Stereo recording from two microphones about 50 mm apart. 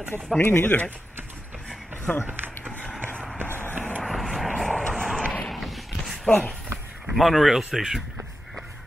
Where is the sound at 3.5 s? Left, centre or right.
Left.